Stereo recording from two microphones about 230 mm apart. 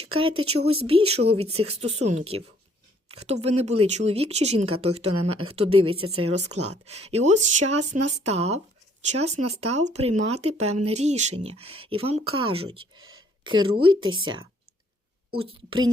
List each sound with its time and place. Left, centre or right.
0.3 s speech: right
0.6 s speech: right
3.4 s speech: right